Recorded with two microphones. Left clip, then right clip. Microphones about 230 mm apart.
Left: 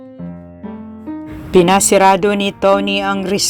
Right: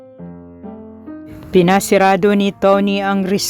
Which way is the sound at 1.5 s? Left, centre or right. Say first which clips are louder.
Left 2 dB; right.